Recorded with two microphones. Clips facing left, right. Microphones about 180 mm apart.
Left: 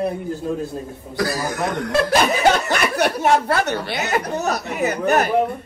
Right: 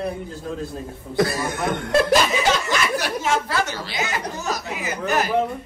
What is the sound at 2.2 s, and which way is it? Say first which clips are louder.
Speech: left 4 dB; 60° left (ahead or behind).